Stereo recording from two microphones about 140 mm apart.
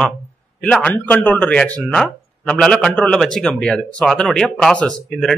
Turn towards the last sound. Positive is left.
turn(degrees=5)  # may be behind; listen again after turning